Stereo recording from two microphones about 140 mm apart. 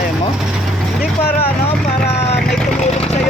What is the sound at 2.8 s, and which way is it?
Vehicle, 50° left (ahead or behind).